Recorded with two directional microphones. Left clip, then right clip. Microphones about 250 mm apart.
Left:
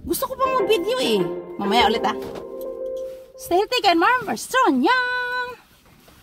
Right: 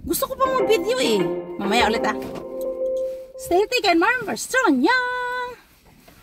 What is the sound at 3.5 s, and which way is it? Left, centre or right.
Speech, centre.